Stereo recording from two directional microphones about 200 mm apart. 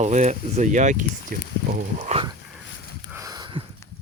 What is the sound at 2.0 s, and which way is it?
Speech, 35° right (ahead or behind).